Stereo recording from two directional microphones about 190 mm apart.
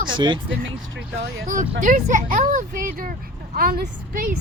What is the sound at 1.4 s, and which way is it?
Speech, 45° right (ahead or behind).